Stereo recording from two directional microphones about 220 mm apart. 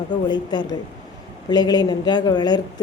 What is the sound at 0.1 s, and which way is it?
Speech, 20° left (ahead or behind).